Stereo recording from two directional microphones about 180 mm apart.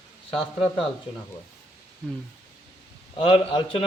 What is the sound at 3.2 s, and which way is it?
Speech, 30° left (ahead or behind).